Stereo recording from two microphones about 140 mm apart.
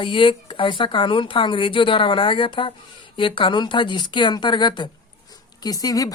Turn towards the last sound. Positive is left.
turn(degrees=25)  # may be behind; listen again after turning